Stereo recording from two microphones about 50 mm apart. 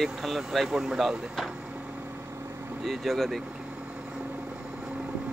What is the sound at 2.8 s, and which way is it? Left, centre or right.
Speech, centre.